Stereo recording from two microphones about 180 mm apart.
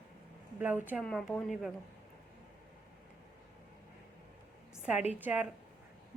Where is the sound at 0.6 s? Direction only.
10° right (ahead or behind).